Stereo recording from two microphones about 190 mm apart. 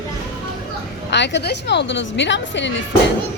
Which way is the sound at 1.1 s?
65° left (ahead or behind).